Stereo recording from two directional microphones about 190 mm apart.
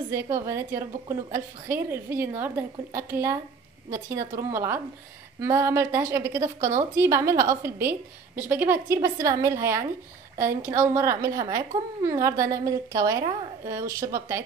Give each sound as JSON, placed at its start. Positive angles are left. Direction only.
{"t": 0.1, "sound": "a woman's voice", "side_deg": -15}